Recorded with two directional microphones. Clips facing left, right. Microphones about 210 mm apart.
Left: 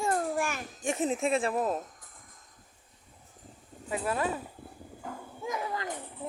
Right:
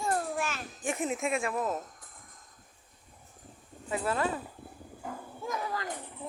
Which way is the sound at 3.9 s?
15° left (ahead or behind).